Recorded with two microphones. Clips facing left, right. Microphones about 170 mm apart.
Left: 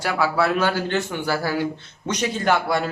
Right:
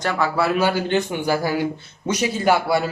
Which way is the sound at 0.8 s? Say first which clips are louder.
Right 3 dB; 15° right (ahead or behind).